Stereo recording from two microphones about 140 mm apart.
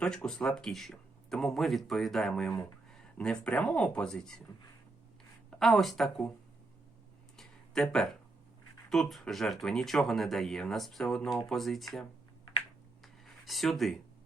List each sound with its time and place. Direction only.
0.0 s speech: 5° left (ahead or behind)
5.5 s speech: 5° left (ahead or behind)
7.3 s a sound: 5° left (ahead or behind)
8.9 s speech: centre (ahead or behind)
13.2 s speech: centre (ahead or behind)